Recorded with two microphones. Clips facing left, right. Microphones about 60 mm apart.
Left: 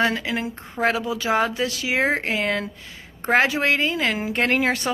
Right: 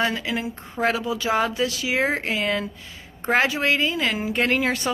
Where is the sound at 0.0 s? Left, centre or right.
Left.